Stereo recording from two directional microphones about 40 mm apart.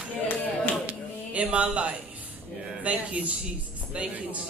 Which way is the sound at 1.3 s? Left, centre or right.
Right.